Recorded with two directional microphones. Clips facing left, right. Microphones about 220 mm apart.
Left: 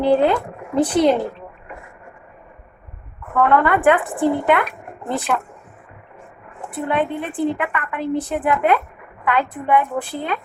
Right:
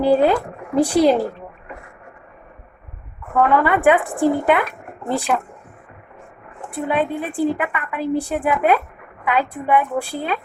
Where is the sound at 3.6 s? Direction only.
10° right (ahead or behind).